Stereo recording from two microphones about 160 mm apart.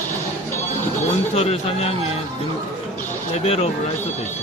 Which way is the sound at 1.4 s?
40° left (ahead or behind).